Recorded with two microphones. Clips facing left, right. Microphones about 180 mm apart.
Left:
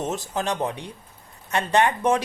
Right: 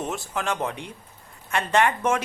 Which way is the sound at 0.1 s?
40° left (ahead or behind).